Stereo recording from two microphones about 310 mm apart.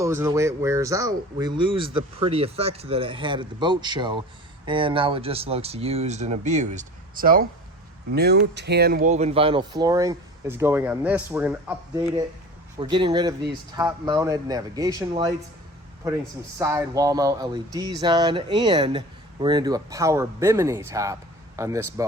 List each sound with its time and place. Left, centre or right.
0.0 s speech: centre
16.6 s speech: centre